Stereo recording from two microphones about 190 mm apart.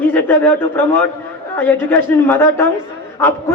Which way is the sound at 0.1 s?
10° left (ahead or behind).